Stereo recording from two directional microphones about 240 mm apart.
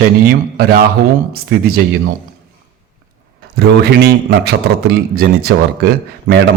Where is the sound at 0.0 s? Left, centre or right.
Right.